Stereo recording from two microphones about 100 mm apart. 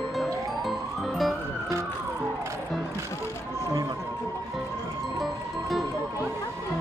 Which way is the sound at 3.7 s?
40° right (ahead or behind).